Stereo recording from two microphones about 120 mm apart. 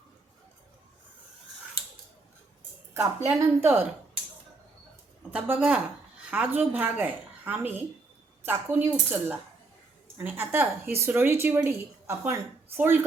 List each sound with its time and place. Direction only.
3.2 s speech: 20° right (ahead or behind)
5.3 s a woman's voice: 10° right (ahead or behind)